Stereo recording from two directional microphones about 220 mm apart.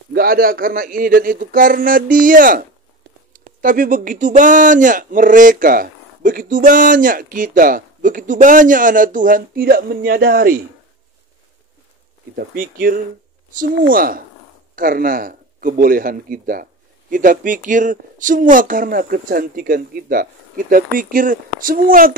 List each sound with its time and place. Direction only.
0.1 s speech: 40° right (ahead or behind)
12.4 s speech: 40° right (ahead or behind)